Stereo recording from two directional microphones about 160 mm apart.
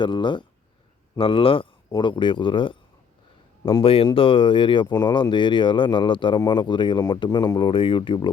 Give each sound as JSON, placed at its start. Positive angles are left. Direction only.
{"t": 0.0, "sound": "speech", "side_deg": 30}